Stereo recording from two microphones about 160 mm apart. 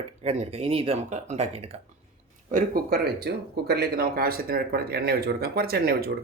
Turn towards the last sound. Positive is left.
turn(degrees=-75)  # may be behind; listen again after turning